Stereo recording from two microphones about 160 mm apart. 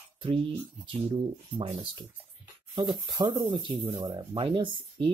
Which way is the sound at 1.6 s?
30° right (ahead or behind).